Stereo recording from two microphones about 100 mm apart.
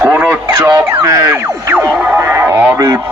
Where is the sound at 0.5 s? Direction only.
40° right (ahead or behind).